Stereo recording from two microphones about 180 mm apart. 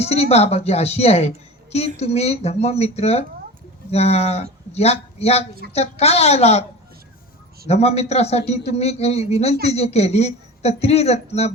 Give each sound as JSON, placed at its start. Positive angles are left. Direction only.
{"t": 0.0, "sound": "a woman's voice", "side_deg": 35}
{"t": 7.7, "sound": "a woman's voice", "side_deg": 35}